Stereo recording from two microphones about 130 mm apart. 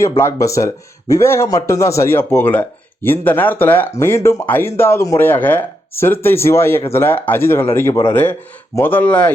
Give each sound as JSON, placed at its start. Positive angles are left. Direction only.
{"t": 0.2, "sound": "a man's voice", "side_deg": 20}